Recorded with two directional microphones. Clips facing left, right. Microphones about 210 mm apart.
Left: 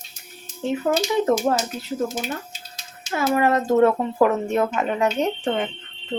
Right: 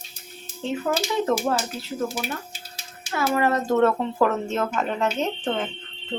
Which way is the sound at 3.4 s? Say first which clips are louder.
Left 3 dB; 15° left (ahead or behind).